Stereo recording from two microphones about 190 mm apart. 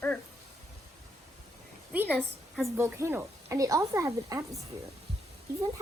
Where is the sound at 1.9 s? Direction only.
5° right (ahead or behind).